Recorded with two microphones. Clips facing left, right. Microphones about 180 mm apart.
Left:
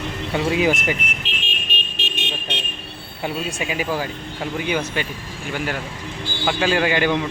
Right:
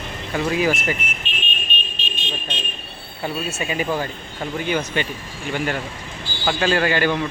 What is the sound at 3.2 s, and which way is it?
A man's voice, 10° left (ahead or behind).